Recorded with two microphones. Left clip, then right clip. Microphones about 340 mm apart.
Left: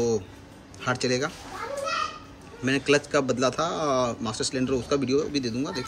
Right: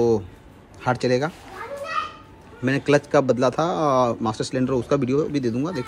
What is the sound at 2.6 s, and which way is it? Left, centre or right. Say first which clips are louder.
Speech: right 3 dB; centre.